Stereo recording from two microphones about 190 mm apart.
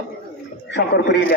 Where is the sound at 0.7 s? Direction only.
65° left (ahead or behind).